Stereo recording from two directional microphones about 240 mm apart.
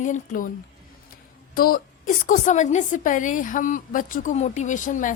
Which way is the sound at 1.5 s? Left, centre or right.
Left.